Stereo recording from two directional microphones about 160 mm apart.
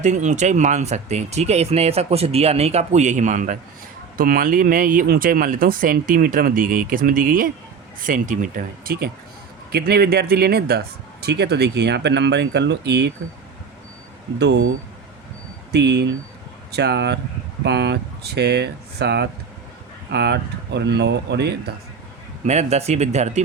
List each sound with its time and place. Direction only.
0.0 s speech: 45° right (ahead or behind)
4.2 s speech: 65° right (ahead or behind)
9.7 s speech: 80° right
15.7 s speech: 90° right
22.4 s speech: 45° right (ahead or behind)